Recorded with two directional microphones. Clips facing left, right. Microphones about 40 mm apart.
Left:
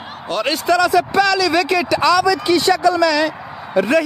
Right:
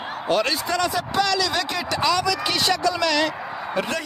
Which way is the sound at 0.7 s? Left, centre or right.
Left.